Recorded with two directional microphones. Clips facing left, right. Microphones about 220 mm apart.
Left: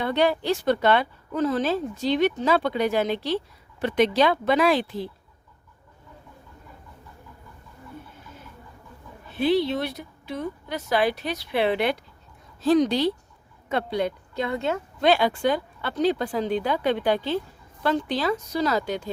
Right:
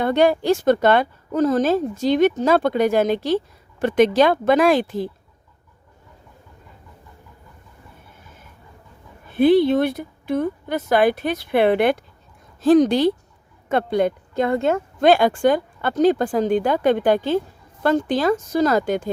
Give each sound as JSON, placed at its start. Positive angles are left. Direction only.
{"t": 0.0, "sound": "a woman's voice", "side_deg": -45}
{"t": 9.3, "sound": "a woman's voice", "side_deg": -50}